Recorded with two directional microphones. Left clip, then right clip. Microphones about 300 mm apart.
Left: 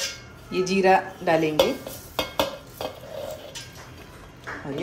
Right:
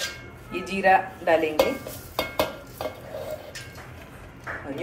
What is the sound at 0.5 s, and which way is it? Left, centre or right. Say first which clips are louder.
Speech: left 1 dB; left.